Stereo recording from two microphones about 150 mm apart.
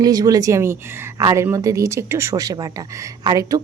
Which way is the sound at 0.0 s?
25° right (ahead or behind).